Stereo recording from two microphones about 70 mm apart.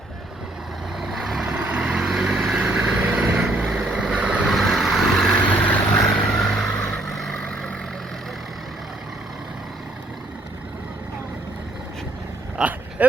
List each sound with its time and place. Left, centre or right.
0.9 s vehicle: centre
1.5 s vehicle: centre
2.8 s vehicle: right
3.2 s vehicle: centre
4.4 s vehicle: centre
5.3 s vehicle: centre
6.1 s vehicle: centre
12.5 s vehicle: right